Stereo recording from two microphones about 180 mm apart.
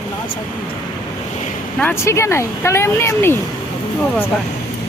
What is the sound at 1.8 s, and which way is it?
Speech, 10° left (ahead or behind).